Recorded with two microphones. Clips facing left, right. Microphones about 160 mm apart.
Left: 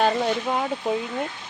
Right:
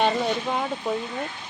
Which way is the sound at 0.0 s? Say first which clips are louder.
Left 1 dB; centre (ahead or behind).